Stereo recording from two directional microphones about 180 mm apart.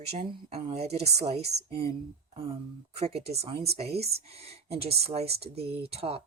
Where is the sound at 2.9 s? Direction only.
35° right (ahead or behind).